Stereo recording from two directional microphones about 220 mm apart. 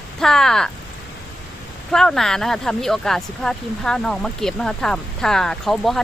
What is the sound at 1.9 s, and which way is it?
Speech, centre (ahead or behind).